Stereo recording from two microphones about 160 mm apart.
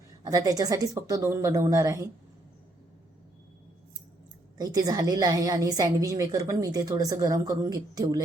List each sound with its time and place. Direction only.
0.3 s a woman's voice: 25° right (ahead or behind)
4.5 s a woman's voice: 25° right (ahead or behind)